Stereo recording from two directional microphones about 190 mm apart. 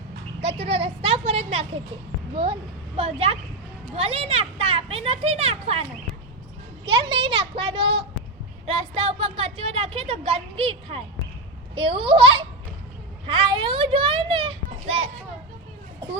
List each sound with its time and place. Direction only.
0.4 s a woman's voice: 30° right (ahead or behind)
6.8 s a child's voice: 25° right (ahead or behind)